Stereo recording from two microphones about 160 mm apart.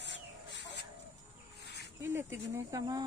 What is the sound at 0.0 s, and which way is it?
Chicken, 90° left.